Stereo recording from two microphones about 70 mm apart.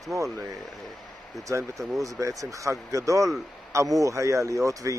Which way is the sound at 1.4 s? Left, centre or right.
Right.